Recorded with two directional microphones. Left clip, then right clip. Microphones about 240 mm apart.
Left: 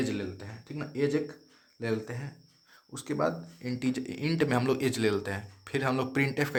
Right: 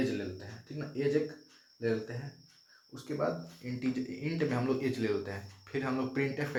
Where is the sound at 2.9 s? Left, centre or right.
Left.